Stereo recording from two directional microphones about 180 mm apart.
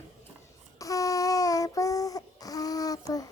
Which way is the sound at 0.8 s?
20° left (ahead or behind).